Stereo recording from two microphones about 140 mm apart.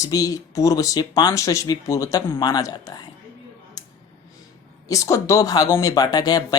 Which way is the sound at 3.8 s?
25° left (ahead or behind).